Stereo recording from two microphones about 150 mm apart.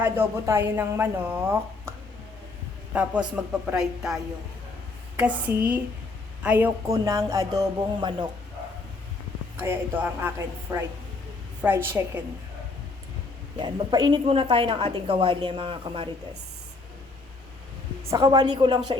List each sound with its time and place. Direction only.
0.0 s a woman's voice: 15° right (ahead or behind)
2.9 s a woman's voice: 10° right (ahead or behind)
6.8 s speech: 20° right (ahead or behind)
9.6 s a woman's voice: 15° right (ahead or behind)
13.6 s speech: 30° right (ahead or behind)
18.1 s speech: 25° right (ahead or behind)